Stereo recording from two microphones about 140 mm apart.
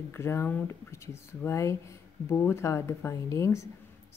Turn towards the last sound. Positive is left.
turn(degrees=20)  # may be behind; listen again after turning